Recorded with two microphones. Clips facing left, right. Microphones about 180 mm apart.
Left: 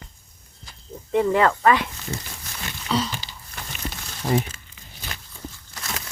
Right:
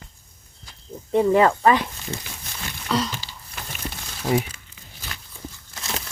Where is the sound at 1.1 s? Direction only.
10° right (ahead or behind).